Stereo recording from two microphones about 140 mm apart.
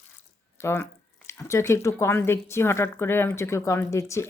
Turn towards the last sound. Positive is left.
turn(degrees=20)  # may be behind; listen again after turning